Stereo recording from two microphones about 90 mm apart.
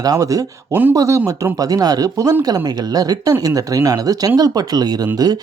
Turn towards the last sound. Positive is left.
turn(degrees=-45)  # may be behind; listen again after turning